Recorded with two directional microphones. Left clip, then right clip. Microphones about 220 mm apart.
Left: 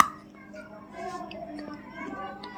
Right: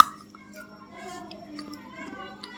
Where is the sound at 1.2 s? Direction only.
25° right (ahead or behind).